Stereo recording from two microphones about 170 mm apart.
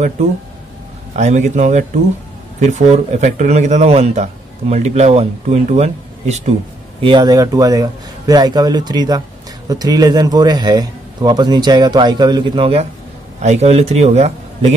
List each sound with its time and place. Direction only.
1.1 s a man's voice: 45° right (ahead or behind)
7.0 s a man's voice: 30° right (ahead or behind)